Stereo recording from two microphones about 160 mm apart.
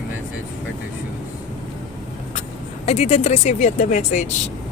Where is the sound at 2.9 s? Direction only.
40° left (ahead or behind).